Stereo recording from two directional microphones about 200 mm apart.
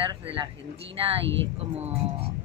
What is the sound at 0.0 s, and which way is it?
Speech, 25° right (ahead or behind).